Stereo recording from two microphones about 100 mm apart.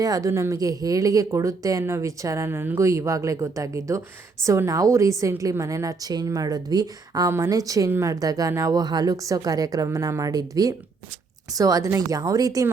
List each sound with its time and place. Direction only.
0.0 s a woman's voice: 35° right (ahead or behind)
7.3 s a woman's voice: 30° right (ahead or behind)